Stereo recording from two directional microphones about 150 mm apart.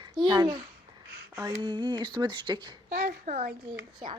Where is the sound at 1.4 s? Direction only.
25° right (ahead or behind).